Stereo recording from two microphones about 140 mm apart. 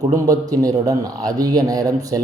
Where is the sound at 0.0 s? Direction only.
25° right (ahead or behind).